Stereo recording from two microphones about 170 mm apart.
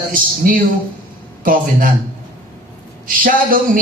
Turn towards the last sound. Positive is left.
turn(degrees=-55)  # may be behind; listen again after turning